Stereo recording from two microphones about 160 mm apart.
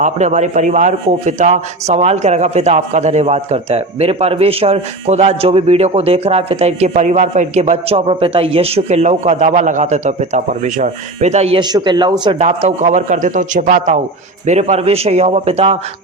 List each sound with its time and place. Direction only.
0.0 s a man's voice: 45° right (ahead or behind)
11.6 s speech: 25° right (ahead or behind)
12.4 s a man's voice: 45° right (ahead or behind)